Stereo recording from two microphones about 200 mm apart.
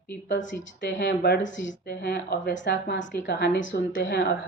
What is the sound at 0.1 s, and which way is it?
Speech, 65° left (ahead or behind).